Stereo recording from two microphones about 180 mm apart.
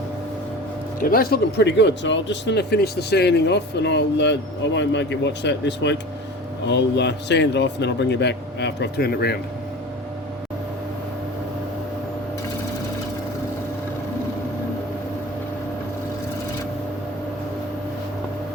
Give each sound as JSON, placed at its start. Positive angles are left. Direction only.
{"t": 0.9, "sound": "speech", "side_deg": 55}